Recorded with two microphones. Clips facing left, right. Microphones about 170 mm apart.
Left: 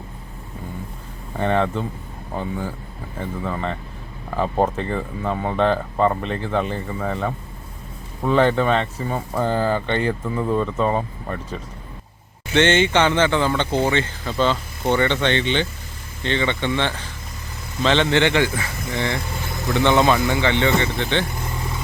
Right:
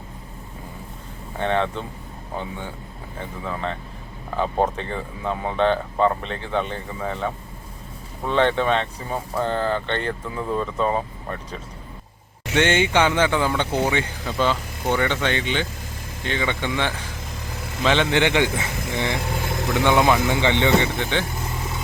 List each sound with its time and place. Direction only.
1.4 s speech: 5° left (ahead or behind)
12.5 s speech: 10° right (ahead or behind)